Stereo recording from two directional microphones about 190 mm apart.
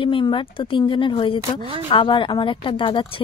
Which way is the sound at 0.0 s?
25° left (ahead or behind).